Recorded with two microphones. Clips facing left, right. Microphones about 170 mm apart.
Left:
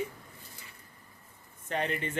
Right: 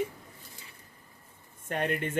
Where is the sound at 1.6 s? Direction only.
55° right (ahead or behind).